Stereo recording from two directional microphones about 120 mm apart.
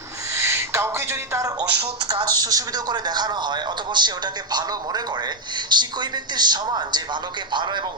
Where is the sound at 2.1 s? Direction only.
35° right (ahead or behind).